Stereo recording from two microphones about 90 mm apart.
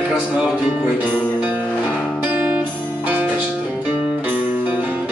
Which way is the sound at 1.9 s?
10° left (ahead or behind).